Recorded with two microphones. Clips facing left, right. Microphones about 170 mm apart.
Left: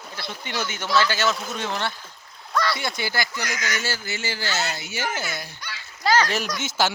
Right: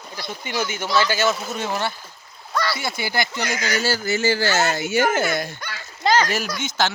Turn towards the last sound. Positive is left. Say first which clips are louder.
# right 1 dB
turn(degrees=5)  # may be behind; listen again after turning